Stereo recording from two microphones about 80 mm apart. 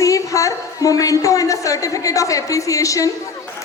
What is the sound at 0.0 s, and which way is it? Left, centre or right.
A woman's voice, left.